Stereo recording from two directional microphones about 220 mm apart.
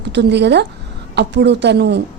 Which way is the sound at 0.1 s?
50° right (ahead or behind).